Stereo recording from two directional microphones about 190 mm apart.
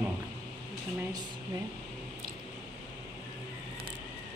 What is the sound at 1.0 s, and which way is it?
Speech, 20° right (ahead or behind).